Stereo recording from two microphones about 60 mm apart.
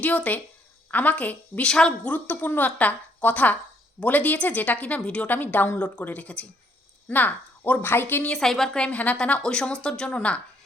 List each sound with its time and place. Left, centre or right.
0.0 s a woman's voice: left
1.7 s a woman's voice: centre
2.1 s a woman's voice: left
5.3 s a woman's voice: left
7.1 s a woman's voice: left
8.3 s a woman's voice: centre